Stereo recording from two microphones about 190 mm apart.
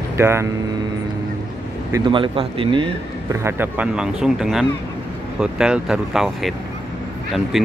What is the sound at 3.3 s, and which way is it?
Speech, 15° right (ahead or behind).